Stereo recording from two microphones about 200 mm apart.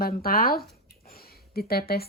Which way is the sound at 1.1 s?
50° left (ahead or behind).